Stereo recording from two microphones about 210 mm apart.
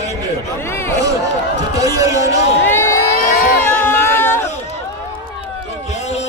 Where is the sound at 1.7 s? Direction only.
15° right (ahead or behind).